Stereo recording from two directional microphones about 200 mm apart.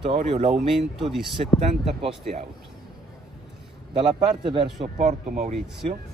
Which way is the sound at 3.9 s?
25° right (ahead or behind).